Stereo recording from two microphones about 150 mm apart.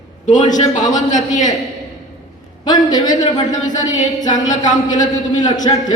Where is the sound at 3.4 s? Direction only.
55° left (ahead or behind).